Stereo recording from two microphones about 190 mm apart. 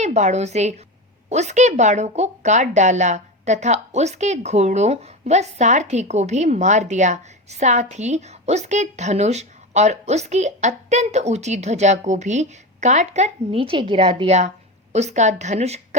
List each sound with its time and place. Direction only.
0.0 s a woman's voice: 35° right (ahead or behind)